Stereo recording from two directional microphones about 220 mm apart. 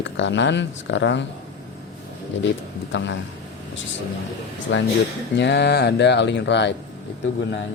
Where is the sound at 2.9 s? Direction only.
55° left (ahead or behind).